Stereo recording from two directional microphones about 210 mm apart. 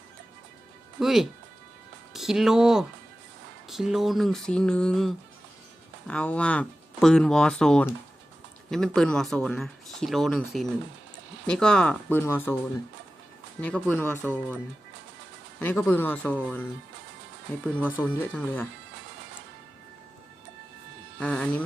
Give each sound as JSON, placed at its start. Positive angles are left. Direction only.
{"t": 0.9, "sound": "speech", "side_deg": 0}
{"t": 13.6, "sound": "speech", "side_deg": 5}
{"t": 15.5, "sound": "speech", "side_deg": 5}
{"t": 17.7, "sound": "speech", "side_deg": 10}
{"t": 21.2, "sound": "speech", "side_deg": 5}